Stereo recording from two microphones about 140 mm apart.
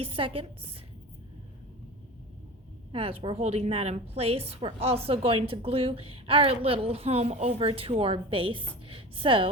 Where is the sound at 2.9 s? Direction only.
45° right (ahead or behind).